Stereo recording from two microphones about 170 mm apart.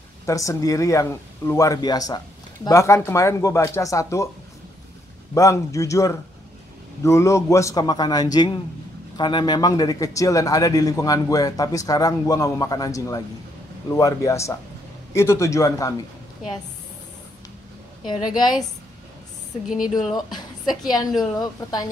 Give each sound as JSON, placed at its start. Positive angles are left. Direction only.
{"t": 0.3, "sound": "a man's voice", "side_deg": 20}
{"t": 5.3, "sound": "a man's voice", "side_deg": 20}
{"t": 18.0, "sound": "a man's voice", "side_deg": 25}
{"t": 19.9, "sound": "speech", "side_deg": 0}
{"t": 20.2, "sound": "a man's voice", "side_deg": 25}